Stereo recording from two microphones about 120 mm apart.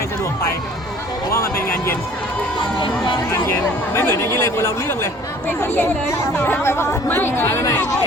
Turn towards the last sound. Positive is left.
turn(degrees=25)  # may be behind; listen again after turning